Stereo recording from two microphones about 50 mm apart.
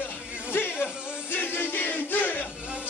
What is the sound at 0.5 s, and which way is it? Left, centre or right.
Music, left.